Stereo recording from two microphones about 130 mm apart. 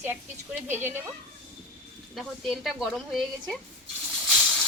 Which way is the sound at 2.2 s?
Centre (ahead or behind).